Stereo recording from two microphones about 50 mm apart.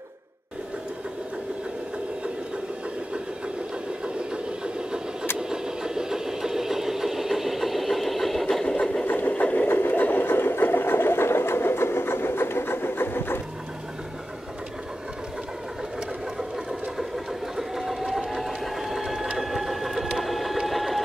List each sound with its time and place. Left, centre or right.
5.5 s engine: centre
9.0 s engine: left
9.3 s sewing machine: left
9.7 s sewing machine: left
17.6 s sewing machine: centre